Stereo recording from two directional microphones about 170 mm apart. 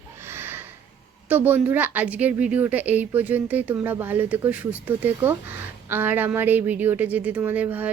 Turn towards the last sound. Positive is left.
turn(degrees=-10)  # may be behind; listen again after turning